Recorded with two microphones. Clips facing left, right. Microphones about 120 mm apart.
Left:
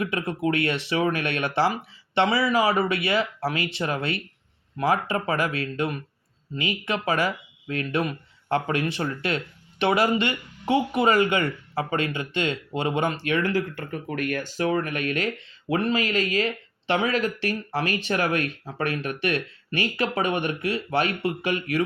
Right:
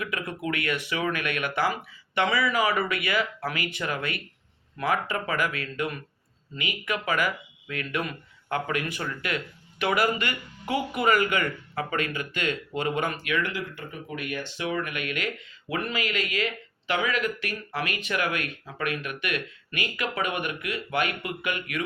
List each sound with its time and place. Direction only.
0.0 s speech: 30° left (ahead or behind)